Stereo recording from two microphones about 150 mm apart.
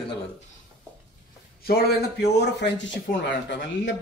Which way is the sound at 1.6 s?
90° left.